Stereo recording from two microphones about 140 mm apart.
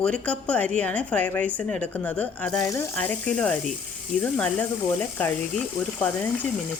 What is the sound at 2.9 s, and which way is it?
A woman's voice, 10° left (ahead or behind).